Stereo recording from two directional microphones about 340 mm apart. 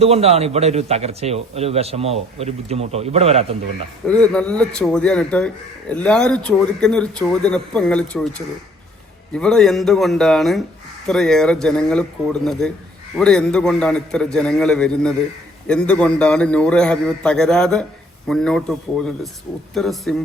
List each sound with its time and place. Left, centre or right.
0.0 s a man's voice: centre
4.0 s speech: centre